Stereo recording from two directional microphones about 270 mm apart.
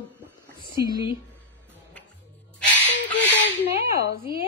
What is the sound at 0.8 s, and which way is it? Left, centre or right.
Speech, right.